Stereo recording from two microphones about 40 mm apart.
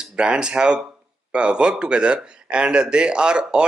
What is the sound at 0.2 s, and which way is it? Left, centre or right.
Speech, right.